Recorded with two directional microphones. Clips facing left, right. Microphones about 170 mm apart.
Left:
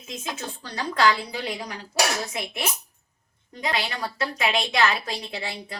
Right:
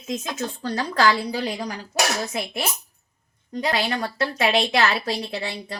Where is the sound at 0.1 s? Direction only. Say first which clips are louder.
Right 6 dB; 45° right (ahead or behind).